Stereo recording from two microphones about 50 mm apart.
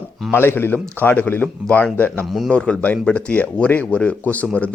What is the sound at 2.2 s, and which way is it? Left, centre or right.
Speech, centre.